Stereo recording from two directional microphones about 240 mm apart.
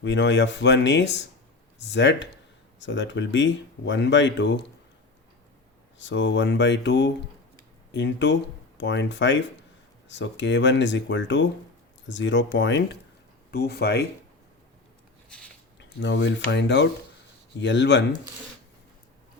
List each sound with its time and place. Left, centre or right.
0.0 s speech: left
6.0 s speech: left
16.0 s speech: left